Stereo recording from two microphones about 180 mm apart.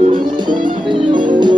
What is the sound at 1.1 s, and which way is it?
Music, 25° right (ahead or behind).